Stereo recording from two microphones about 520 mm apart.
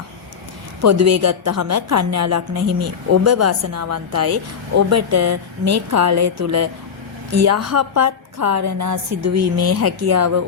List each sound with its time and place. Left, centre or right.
0.8 s a woman's voice: right